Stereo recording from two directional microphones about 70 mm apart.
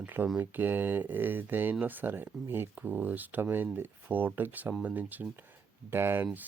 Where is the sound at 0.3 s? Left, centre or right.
Right.